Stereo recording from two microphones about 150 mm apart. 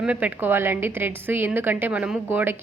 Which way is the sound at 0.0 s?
10° right (ahead or behind).